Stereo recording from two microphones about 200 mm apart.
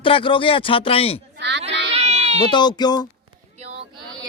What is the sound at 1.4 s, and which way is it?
Child singing, 60° right (ahead or behind).